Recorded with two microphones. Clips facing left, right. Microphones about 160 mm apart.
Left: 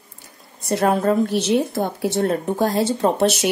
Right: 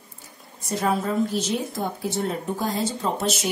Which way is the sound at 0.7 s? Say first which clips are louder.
Left 6 dB; 65° left (ahead or behind).